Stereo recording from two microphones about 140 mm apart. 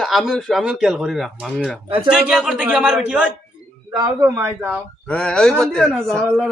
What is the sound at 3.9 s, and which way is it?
Speech, 20° right (ahead or behind).